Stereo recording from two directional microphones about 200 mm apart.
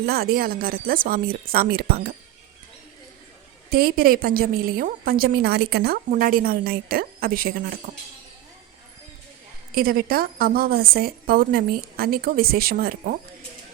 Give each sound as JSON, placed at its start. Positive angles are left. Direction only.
{"t": 0.0, "sound": "speech", "side_deg": -50}
{"t": 3.7, "sound": "speech", "side_deg": -50}
{"t": 9.7, "sound": "speech", "side_deg": -45}